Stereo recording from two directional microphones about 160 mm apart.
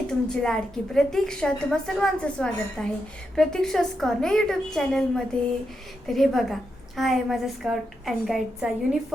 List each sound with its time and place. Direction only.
0.1 s a woman's voice: 5° left (ahead or behind)